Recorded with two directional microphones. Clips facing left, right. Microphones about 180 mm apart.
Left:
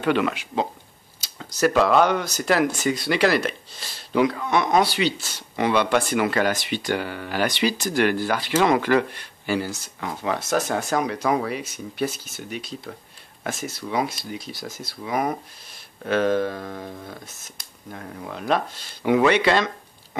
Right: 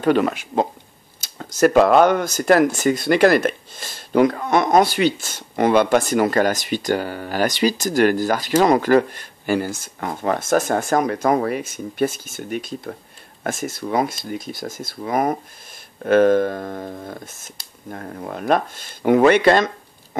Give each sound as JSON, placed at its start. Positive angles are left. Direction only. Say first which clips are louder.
{"t": 0.0, "sound": "speech", "louder": "right 4 dB", "side_deg": -40}